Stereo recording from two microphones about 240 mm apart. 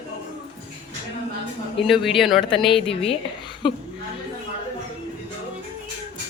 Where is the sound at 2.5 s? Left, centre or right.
Left.